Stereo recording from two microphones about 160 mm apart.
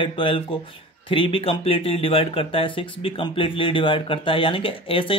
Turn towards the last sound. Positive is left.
turn(degrees=35)  # may be behind; listen again after turning